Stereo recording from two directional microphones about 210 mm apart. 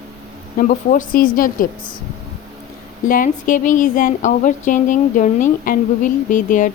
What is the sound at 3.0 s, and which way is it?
Speech, 40° left (ahead or behind).